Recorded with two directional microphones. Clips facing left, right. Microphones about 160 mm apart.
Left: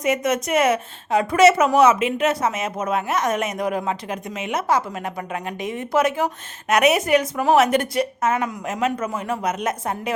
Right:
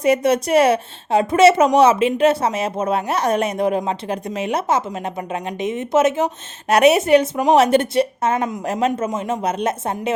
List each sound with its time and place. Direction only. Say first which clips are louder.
0.0 s a woman's voice: right 5 dB; 30° right (ahead or behind)